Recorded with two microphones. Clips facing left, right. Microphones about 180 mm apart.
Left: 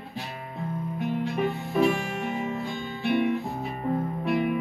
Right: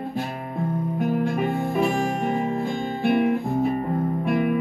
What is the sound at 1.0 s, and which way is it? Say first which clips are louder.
Music: right 3 dB; 50° right (ahead or behind).